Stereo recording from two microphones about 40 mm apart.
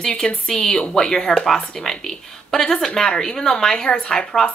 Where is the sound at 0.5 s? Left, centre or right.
Centre.